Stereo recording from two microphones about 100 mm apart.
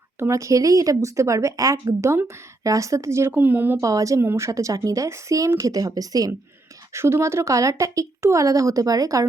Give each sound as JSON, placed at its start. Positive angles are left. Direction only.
{"t": 0.2, "sound": "speech", "side_deg": -30}
{"t": 3.8, "sound": "speech", "side_deg": -35}
{"t": 6.9, "sound": "speech", "side_deg": -25}